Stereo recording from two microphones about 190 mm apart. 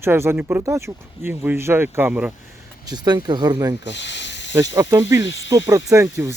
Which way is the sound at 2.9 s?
20° right (ahead or behind).